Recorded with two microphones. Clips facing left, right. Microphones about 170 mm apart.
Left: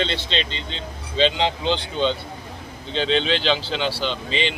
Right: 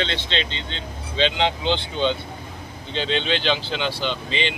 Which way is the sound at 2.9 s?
Centre (ahead or behind).